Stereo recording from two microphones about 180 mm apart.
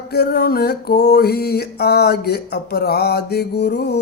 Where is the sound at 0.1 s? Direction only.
60° left (ahead or behind).